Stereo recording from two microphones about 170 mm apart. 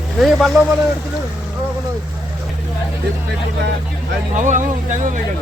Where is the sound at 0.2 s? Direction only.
Centre (ahead or behind).